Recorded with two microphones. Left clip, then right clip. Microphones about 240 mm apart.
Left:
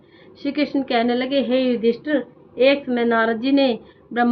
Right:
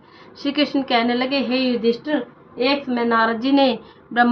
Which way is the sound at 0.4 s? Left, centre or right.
Centre.